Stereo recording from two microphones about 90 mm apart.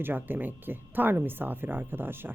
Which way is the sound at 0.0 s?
20° right (ahead or behind).